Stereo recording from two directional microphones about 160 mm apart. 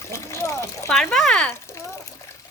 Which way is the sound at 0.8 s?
Centre (ahead or behind).